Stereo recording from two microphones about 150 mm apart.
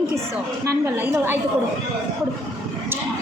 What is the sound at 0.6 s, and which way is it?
Speech, 15° right (ahead or behind).